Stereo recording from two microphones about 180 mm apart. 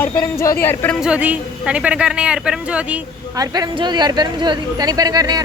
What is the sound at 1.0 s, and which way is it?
Speech, 10° right (ahead or behind).